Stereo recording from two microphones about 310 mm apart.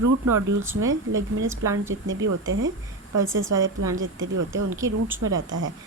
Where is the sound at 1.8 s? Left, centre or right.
Right.